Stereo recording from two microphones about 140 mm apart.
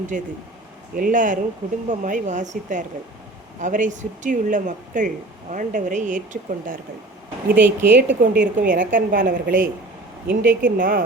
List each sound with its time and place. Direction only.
0.1 s speech: 70° right (ahead or behind)
7.5 s speech: 15° right (ahead or behind)
7.9 s a woman's voice: 90° right
8.5 s a woman's voice: 70° right (ahead or behind)